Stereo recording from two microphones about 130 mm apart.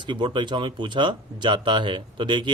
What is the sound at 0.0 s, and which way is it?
Speech, 35° right (ahead or behind).